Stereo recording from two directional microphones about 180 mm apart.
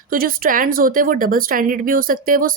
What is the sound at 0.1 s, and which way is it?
A woman's voice, 50° right (ahead or behind).